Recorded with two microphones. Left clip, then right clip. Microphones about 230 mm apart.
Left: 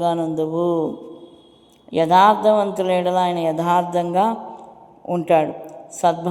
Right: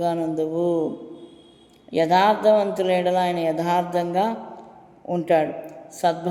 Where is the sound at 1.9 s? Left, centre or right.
Centre.